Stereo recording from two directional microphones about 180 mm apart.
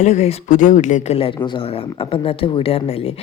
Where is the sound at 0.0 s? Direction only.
40° left (ahead or behind).